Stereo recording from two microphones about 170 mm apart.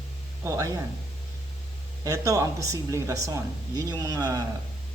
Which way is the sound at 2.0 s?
20° right (ahead or behind).